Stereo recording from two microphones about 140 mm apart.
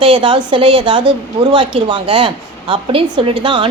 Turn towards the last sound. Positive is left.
turn(degrees=-35)  # may be behind; listen again after turning